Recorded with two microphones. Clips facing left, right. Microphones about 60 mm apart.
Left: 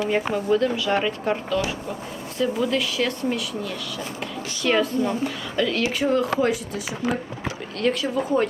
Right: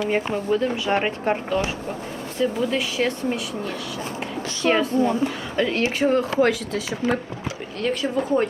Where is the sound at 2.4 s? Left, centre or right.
Centre.